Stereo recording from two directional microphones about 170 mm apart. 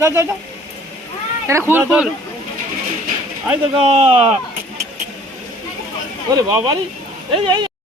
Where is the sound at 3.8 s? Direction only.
35° right (ahead or behind).